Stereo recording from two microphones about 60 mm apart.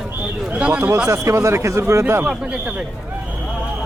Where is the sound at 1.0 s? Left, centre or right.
Right.